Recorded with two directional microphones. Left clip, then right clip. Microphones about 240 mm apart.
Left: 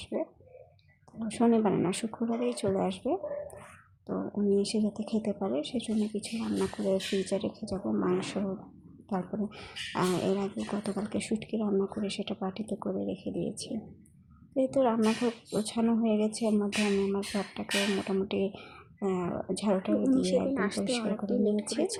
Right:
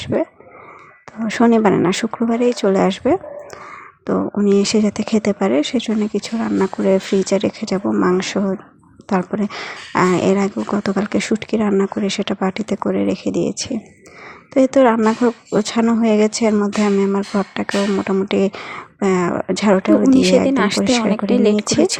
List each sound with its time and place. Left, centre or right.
0.0 s speech: right
1.3 s speech: right